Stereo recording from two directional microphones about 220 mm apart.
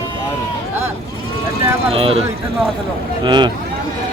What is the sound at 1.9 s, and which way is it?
Speech, 25° right (ahead or behind).